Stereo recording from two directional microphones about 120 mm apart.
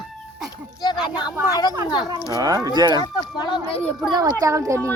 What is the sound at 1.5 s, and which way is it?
Speech, 35° left (ahead or behind).